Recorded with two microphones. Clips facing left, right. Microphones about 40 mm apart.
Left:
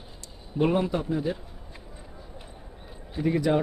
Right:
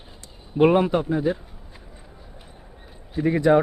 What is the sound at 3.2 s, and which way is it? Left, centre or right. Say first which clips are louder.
Speech: right 6 dB; right.